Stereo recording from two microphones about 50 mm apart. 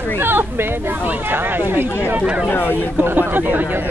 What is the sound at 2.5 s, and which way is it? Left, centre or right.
Speech, left.